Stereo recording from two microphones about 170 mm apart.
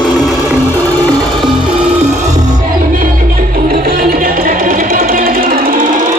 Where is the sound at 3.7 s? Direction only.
60° right (ahead or behind).